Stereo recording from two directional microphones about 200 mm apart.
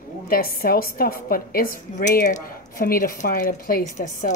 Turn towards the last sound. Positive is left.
turn(degrees=40)  # may be behind; listen again after turning